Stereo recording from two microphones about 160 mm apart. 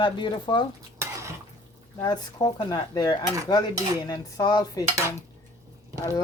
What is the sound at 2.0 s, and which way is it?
Speech, 25° left (ahead or behind).